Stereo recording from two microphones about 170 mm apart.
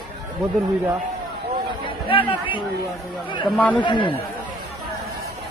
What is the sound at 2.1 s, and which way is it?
Speech, 30° left (ahead or behind).